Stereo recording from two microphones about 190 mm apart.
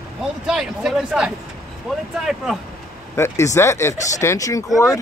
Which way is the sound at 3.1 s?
15° left (ahead or behind).